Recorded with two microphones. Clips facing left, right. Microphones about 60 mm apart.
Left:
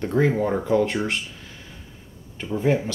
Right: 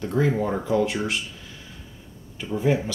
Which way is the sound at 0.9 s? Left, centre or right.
Centre.